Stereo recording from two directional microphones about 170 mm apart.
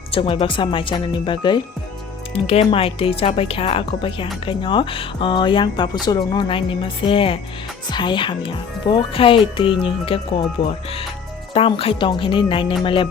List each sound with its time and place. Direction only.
0.1 s speech: 30° left (ahead or behind)